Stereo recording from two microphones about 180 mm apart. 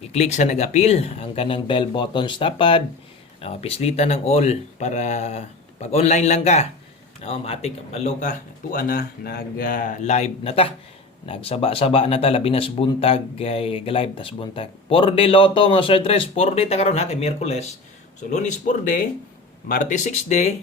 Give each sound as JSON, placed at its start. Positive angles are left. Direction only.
{"t": 0.1, "sound": "speech", "side_deg": 40}